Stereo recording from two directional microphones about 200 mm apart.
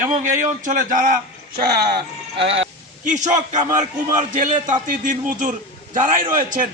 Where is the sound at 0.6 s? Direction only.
40° right (ahead or behind).